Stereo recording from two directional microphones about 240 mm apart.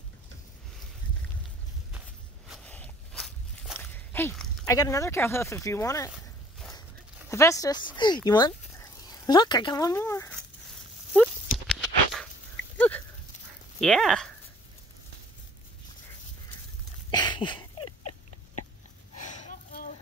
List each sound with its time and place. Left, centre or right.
1.9 s walk: centre
4.6 s speech: centre
7.2 s speech: centre
11.1 s walk: centre
12.7 s horse: centre
13.7 s speech: centre
17.1 s a sound: centre
18.6 s a sound: left
19.3 s gasp: left